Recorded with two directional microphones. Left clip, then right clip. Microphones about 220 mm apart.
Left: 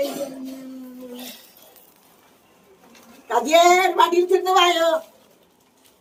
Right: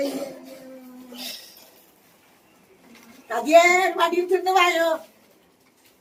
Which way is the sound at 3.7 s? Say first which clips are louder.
Left 4 dB; 10° right (ahead or behind).